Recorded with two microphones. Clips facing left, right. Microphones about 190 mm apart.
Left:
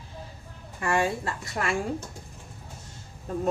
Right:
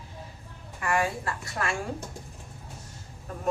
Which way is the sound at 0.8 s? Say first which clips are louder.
Left 2 dB; 25° left (ahead or behind).